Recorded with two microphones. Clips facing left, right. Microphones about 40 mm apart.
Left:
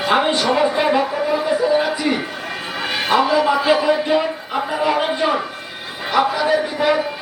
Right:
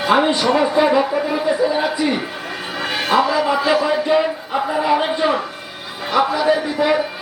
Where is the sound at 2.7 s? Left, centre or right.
Centre.